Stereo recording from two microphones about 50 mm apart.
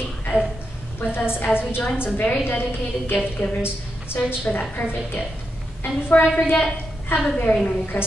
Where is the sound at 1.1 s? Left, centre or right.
Left.